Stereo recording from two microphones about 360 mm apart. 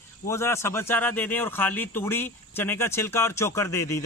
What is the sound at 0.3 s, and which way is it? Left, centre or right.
Speech, centre.